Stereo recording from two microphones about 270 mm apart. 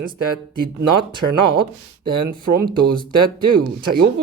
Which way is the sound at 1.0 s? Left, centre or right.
Centre.